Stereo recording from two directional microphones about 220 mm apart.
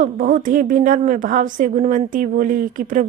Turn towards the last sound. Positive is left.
turn(degrees=-35)  # may be behind; listen again after turning